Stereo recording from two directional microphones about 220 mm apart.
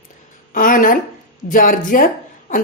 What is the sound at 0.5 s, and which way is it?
A woman's voice, 40° left (ahead or behind).